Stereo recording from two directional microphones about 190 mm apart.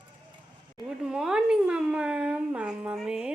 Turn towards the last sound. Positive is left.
turn(degrees=-5)  # may be behind; listen again after turning